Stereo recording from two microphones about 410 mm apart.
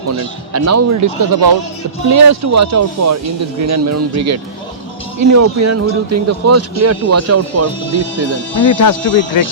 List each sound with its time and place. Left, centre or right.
0.2 s speech: right
2.0 s speech: right
8.5 s speech: left